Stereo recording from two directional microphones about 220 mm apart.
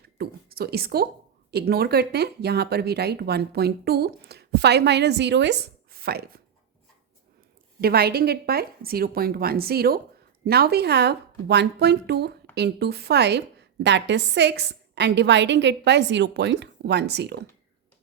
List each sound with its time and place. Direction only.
0.2 s a woman's voice: 45° right (ahead or behind)
7.8 s speech: 45° right (ahead or behind)